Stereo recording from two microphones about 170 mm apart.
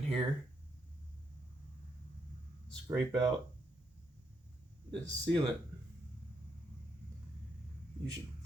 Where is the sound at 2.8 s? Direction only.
25° right (ahead or behind).